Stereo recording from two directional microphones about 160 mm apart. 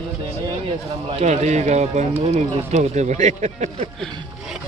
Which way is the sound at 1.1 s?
45° right (ahead or behind).